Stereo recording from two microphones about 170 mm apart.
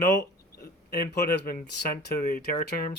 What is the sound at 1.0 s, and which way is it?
Speech, 55° left (ahead or behind).